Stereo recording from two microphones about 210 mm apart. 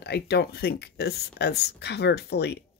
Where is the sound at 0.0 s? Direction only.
50° left (ahead or behind).